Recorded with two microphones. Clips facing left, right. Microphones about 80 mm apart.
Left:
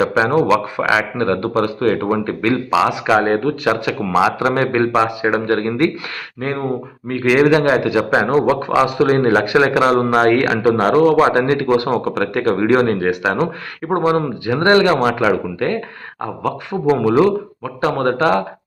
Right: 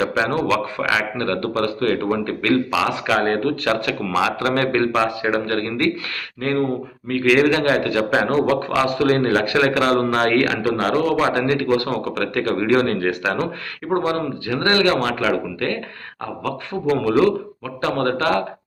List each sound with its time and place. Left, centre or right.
0.2 s a man's voice: centre
16.9 s a man's voice: left